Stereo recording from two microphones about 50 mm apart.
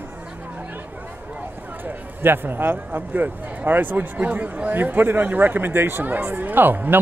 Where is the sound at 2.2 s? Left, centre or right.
Right.